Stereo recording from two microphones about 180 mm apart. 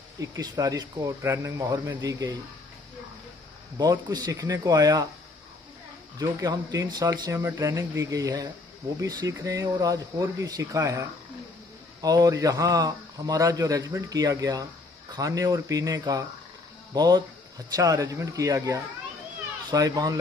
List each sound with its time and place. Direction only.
0.2 s a man's voice: 20° right (ahead or behind)
3.7 s a man's voice: 20° right (ahead or behind)
6.1 s a man's voice: 20° right (ahead or behind)